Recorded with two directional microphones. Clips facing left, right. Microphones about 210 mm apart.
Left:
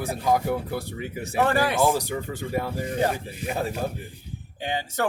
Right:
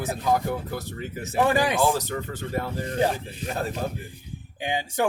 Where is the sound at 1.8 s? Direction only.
15° left (ahead or behind).